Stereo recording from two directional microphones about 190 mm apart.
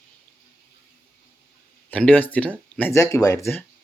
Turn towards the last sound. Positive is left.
turn(degrees=15)  # may be behind; listen again after turning